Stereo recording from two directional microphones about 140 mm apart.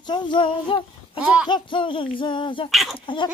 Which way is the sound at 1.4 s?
35° left (ahead or behind).